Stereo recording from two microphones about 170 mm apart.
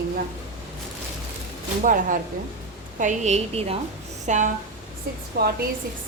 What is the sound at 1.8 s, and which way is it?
A woman's voice, 50° right (ahead or behind).